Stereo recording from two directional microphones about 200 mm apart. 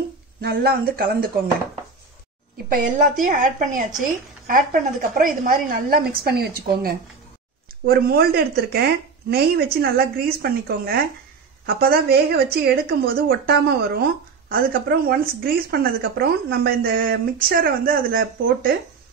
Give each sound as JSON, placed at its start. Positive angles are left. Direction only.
{"t": 0.4, "sound": "a woman's voice", "side_deg": -50}
{"t": 2.7, "sound": "a woman's voice", "side_deg": -40}